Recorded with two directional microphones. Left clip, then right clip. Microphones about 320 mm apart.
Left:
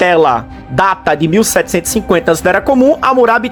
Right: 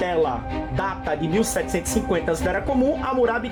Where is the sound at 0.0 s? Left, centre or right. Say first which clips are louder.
Left 13 dB; centre.